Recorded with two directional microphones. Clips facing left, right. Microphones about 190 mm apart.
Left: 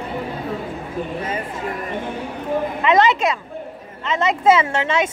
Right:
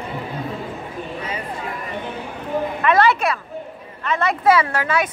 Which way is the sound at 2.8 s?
20° left (ahead or behind).